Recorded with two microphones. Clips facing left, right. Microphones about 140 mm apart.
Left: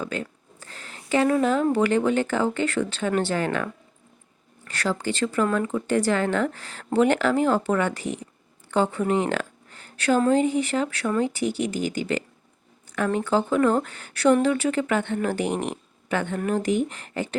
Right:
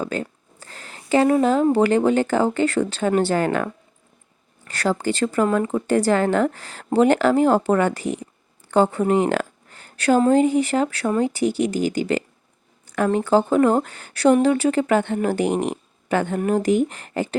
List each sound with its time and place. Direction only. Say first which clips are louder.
0.0 s a sound: right 4 dB; 40° right (ahead or behind)
1.7 s speech: right 4 dB; 35° right (ahead or behind)
4.7 s speech: right 4 dB; 40° right (ahead or behind)